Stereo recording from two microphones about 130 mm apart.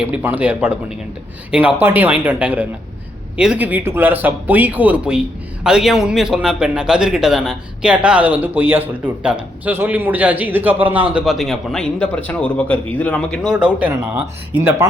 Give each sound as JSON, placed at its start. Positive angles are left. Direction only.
{"t": 0.0, "sound": "a man's voice", "side_deg": -10}
{"t": 11.1, "sound": "a man's voice", "side_deg": 0}
{"t": 13.5, "sound": "a man's voice", "side_deg": -10}